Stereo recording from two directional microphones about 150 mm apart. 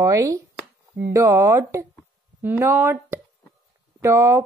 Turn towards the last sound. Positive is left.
turn(degrees=-20)  # may be behind; listen again after turning